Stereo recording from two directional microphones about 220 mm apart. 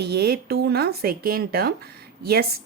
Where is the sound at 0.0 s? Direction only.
45° right (ahead or behind).